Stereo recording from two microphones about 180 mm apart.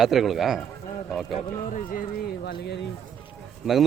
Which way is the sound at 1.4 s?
45° left (ahead or behind).